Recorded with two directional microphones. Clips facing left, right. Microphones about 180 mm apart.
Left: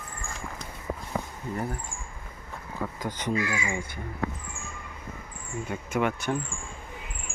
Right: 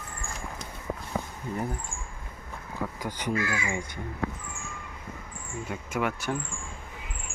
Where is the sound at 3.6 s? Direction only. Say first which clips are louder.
Even; 15° right (ahead or behind).